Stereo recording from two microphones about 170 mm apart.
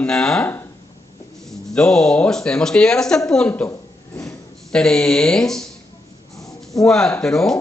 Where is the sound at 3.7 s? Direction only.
20° left (ahead or behind).